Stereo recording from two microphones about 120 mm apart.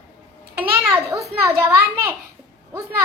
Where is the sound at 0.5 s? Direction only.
15° right (ahead or behind).